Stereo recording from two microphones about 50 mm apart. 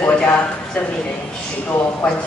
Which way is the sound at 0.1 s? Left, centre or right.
Left.